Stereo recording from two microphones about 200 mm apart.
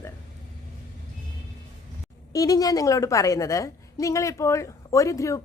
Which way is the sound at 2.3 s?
15° left (ahead or behind).